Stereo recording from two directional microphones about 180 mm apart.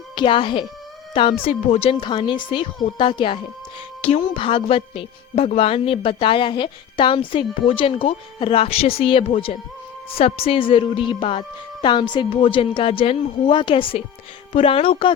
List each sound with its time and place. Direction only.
0.2 s a woman's voice: 30° left (ahead or behind)